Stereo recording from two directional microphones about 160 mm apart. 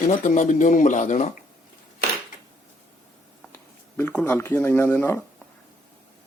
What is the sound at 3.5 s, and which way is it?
Speech, 10° left (ahead or behind).